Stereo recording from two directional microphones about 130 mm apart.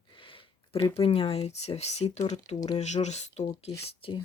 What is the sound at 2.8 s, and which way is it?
Speech, 60° left (ahead or behind).